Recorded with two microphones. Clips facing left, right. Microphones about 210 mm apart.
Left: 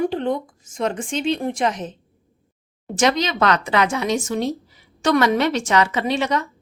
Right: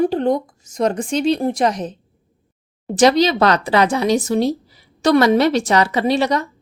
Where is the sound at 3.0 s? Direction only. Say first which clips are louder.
Right 6 dB; 35° right (ahead or behind).